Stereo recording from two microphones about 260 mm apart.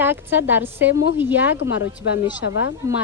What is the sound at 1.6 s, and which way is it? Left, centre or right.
Speech, left.